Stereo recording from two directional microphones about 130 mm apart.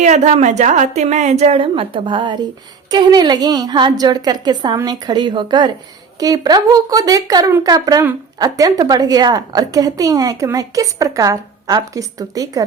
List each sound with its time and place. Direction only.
0.0 s a woman's voice: 65° right (ahead or behind)
1.5 s a woman's voice: 45° right (ahead or behind); by 12.6 s 25° right (ahead or behind)